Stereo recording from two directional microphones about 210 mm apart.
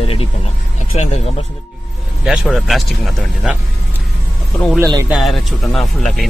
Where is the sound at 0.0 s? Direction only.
25° left (ahead or behind).